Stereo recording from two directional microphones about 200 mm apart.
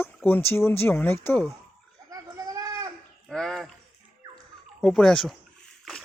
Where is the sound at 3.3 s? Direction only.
Centre (ahead or behind).